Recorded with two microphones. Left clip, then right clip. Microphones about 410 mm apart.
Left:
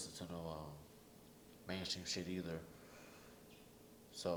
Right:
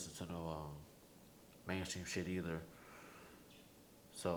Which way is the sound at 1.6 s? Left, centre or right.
Right.